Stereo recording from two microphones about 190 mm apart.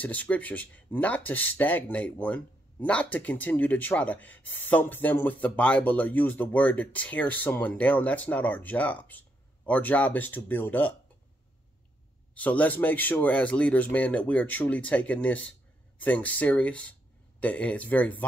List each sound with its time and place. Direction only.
0.0 s speech: 10° left (ahead or behind)
12.4 s speech: 10° left (ahead or behind)